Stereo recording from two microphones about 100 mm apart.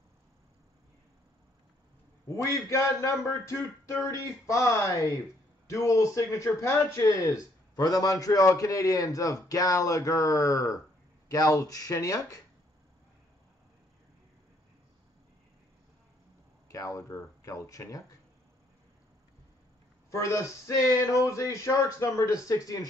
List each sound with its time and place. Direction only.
2.2 s a man's voice: 25° left (ahead or behind)
16.6 s speech: 35° left (ahead or behind)
20.1 s a man's voice: 30° left (ahead or behind)